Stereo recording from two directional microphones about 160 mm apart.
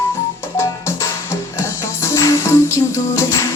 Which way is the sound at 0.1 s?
15° left (ahead or behind).